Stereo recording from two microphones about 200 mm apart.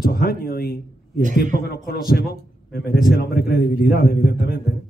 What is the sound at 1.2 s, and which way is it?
Speech, 40° right (ahead or behind).